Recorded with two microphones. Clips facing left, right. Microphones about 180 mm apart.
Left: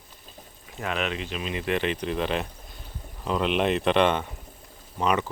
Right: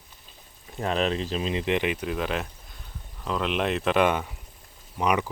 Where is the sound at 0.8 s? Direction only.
35° right (ahead or behind).